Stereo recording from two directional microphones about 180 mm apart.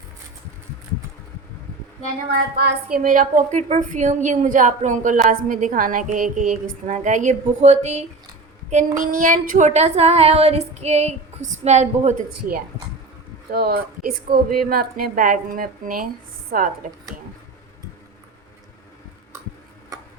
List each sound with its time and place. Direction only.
3.0 s a woman's voice: 50° right (ahead or behind)
8.7 s female singing: 50° right (ahead or behind)
13.5 s a woman's voice: 60° right (ahead or behind)